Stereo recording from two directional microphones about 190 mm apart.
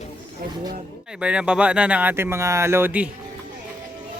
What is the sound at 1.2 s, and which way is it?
Speech, 5° right (ahead or behind).